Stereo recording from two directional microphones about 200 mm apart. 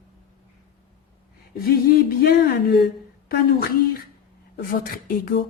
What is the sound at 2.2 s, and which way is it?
Speech, 50° left (ahead or behind).